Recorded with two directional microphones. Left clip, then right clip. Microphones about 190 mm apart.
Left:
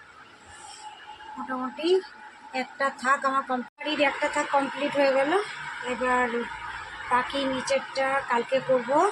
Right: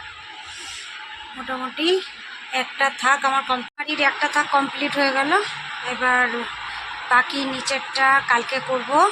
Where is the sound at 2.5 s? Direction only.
15° right (ahead or behind).